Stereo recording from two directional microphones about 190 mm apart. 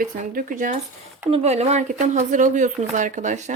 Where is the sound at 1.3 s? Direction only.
35° right (ahead or behind).